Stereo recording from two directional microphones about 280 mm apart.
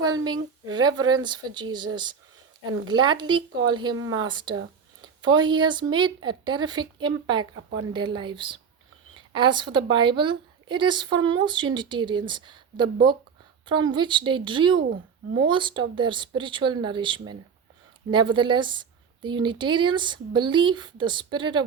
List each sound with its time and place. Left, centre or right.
0.0 s a woman's voice: centre
3.9 s speech: right
4.2 s a woman's voice: centre